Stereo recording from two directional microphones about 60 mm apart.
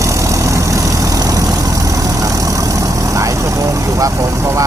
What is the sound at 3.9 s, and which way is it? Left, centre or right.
Speech, right.